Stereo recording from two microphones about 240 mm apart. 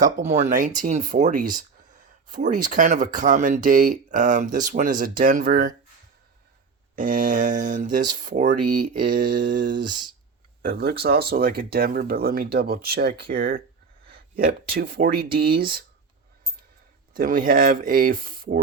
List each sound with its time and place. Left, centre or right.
0.0 s speech: right
6.9 s speech: right
17.2 s speech: right